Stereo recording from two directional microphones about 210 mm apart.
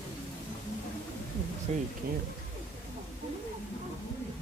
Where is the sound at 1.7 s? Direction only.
30° right (ahead or behind).